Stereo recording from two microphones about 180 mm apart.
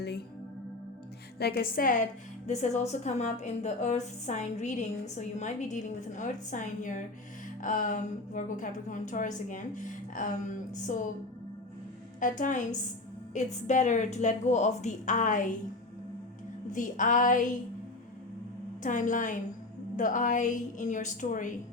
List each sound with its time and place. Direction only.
0.0 s music: 65° left (ahead or behind)
1.4 s a woman's voice: 60° left (ahead or behind)
2.5 s a woman's voice: 40° left (ahead or behind)
12.4 s a woman's voice: 45° left (ahead or behind)
16.7 s a woman's voice: 45° left (ahead or behind)
18.8 s a woman's voice: 45° left (ahead or behind)